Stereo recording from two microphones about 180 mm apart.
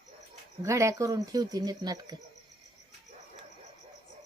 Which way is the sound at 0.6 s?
15° right (ahead or behind).